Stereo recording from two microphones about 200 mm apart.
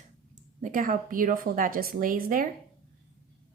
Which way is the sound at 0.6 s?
40° right (ahead or behind).